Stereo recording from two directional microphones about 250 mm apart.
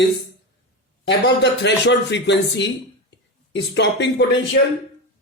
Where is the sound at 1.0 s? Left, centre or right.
Left.